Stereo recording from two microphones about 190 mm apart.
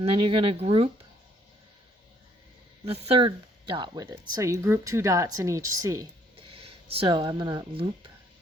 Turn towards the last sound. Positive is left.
turn(degrees=-25)  # may be behind; listen again after turning